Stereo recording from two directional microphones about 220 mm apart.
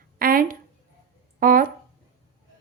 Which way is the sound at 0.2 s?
40° right (ahead or behind).